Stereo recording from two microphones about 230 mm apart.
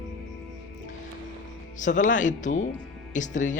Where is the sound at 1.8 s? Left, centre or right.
Left.